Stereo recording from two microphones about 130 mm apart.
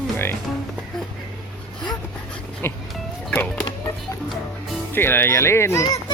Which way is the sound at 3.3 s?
10° left (ahead or behind).